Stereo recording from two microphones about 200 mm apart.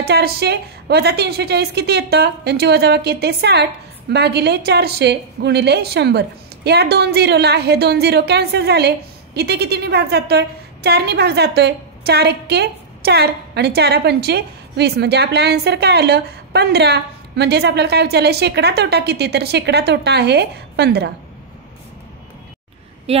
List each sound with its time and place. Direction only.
0.0 s a woman's voice: 55° right (ahead or behind)
23.1 s speech: 30° right (ahead or behind)